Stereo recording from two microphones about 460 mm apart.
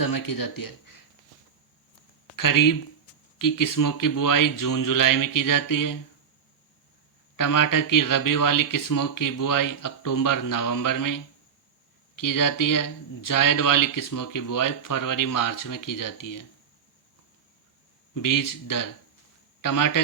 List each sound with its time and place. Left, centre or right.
0.0 s speech: left
2.3 s speech: left
7.3 s speech: left
18.1 s speech: left